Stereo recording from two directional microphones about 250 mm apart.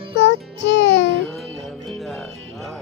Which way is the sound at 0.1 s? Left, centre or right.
Left.